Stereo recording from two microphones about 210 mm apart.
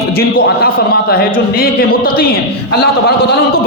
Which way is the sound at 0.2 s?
45° left (ahead or behind).